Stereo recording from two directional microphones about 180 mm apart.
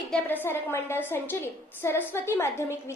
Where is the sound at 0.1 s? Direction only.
10° left (ahead or behind).